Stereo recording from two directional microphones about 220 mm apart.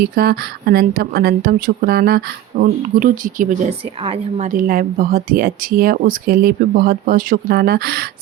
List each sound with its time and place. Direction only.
0.0 s a woman's voice: 45° right (ahead or behind)